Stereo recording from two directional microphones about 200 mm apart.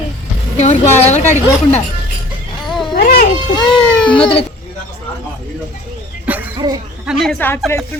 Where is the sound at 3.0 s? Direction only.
50° left (ahead or behind).